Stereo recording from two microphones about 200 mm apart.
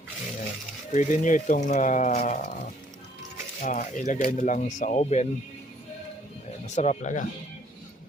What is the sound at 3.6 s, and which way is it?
Speech, 40° left (ahead or behind).